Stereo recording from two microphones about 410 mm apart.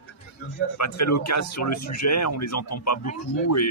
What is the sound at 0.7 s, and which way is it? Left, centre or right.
Speech, left.